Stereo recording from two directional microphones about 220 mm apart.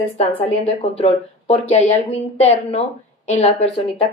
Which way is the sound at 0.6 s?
30° left (ahead or behind).